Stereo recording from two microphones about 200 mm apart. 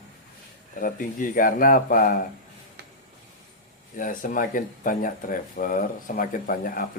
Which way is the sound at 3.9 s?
40° left (ahead or behind).